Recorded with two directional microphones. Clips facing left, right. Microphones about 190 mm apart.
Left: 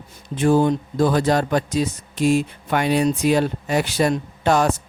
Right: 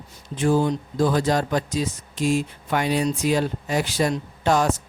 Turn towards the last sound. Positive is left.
turn(degrees=65)  # may be behind; listen again after turning